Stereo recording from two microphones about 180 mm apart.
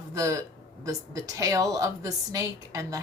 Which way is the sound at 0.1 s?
15° right (ahead or behind).